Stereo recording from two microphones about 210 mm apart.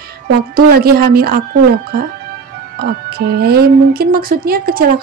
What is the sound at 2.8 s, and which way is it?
A woman's voice, 45° right (ahead or behind).